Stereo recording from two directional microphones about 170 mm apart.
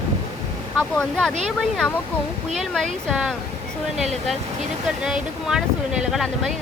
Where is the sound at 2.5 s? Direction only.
Centre (ahead or behind).